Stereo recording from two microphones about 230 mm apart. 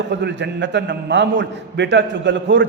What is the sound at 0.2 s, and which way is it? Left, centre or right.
A man's voice, right.